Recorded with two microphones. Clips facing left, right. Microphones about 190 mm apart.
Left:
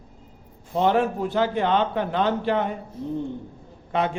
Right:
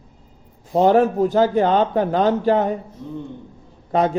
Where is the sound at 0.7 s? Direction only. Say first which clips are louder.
Right 6 dB; 40° right (ahead or behind).